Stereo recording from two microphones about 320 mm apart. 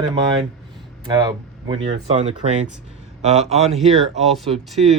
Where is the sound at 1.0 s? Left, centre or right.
Centre.